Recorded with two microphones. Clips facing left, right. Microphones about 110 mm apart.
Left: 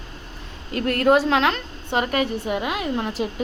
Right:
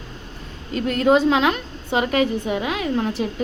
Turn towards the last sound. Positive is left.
turn(degrees=5)  # may be behind; listen again after turning